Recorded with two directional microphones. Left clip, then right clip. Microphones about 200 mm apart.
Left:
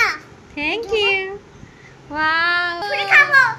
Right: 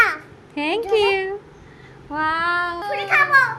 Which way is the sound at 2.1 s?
10° right (ahead or behind).